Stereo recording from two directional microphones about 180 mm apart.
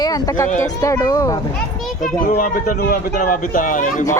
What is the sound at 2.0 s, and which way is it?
Speech, 50° left (ahead or behind).